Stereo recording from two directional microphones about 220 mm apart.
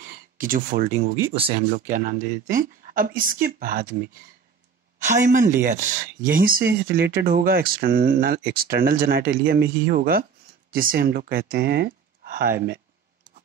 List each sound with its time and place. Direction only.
0.0 s speech: 40° right (ahead or behind)
5.0 s speech: 35° right (ahead or behind)